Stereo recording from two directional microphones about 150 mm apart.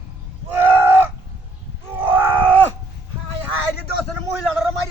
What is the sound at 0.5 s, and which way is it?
Fowl, 15° right (ahead or behind).